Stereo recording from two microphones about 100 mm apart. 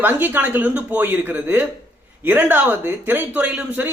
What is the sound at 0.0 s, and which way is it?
A man's voice, 20° right (ahead or behind).